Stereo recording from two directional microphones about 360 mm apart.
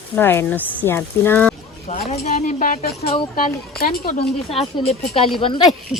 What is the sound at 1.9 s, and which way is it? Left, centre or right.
Speech, centre.